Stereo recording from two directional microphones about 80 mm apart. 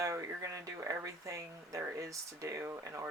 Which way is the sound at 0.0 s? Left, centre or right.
Right.